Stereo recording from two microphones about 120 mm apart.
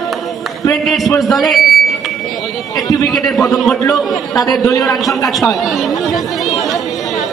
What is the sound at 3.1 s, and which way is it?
A man's voice, centre (ahead or behind).